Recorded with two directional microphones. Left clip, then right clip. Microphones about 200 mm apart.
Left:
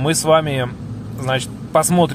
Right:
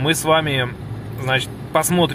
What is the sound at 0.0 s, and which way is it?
Speech, 15° left (ahead or behind).